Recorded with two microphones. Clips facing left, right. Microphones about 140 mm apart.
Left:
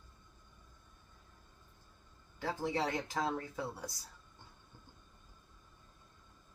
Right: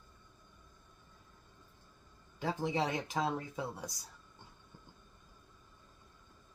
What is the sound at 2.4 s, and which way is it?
Speech, 20° right (ahead or behind).